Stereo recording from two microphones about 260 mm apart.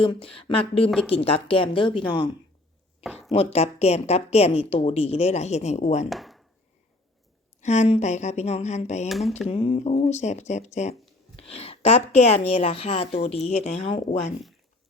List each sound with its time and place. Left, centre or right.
0.0 s a woman's voice: left
0.9 s speech: centre
1.2 s a woman's voice: left
6.1 s speech: centre
7.6 s a woman's voice: left
9.0 s speech: centre
9.5 s a woman's voice: left